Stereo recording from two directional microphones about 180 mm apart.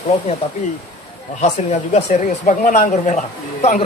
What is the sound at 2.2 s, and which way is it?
A woman's voice, 45° left (ahead or behind).